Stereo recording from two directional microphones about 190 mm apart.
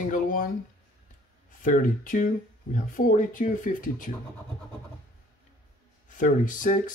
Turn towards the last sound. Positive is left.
turn(degrees=45)  # may be behind; listen again after turning